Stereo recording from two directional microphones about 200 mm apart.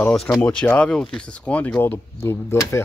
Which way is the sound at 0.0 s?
5° left (ahead or behind).